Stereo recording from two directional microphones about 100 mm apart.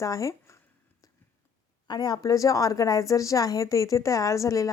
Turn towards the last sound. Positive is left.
turn(degrees=35)  # may be behind; listen again after turning